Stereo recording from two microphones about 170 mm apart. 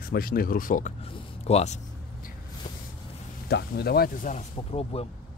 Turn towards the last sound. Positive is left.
turn(degrees=35)  # may be behind; listen again after turning